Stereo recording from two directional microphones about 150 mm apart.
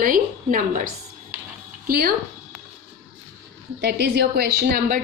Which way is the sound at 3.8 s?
90° right.